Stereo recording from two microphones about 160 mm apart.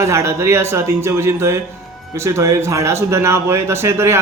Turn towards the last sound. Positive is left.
turn(degrees=-15)  # may be behind; listen again after turning